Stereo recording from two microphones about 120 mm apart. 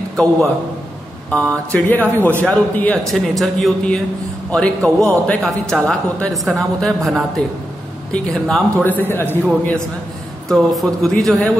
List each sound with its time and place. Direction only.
0.1 s a man's voice: 5° left (ahead or behind)
9.1 s a man's voice: 15° left (ahead or behind)
10.5 s a man's voice: centre (ahead or behind)